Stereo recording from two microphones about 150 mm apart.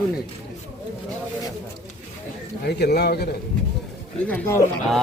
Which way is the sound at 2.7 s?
90° left.